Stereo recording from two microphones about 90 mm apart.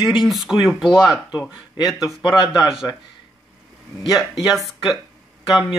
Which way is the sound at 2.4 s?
60° left (ahead or behind).